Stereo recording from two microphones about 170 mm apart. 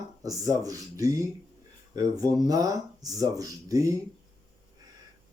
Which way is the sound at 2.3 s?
20° right (ahead or behind).